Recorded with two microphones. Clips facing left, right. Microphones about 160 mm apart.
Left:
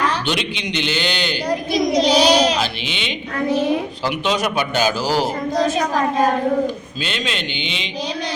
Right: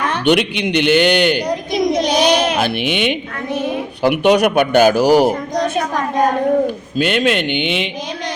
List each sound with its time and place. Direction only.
0.1 s speech: 60° right (ahead or behind)
7.0 s speech: 55° right (ahead or behind)